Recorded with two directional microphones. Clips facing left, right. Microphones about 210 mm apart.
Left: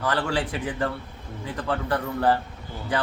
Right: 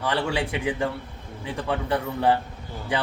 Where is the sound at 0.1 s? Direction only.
15° right (ahead or behind).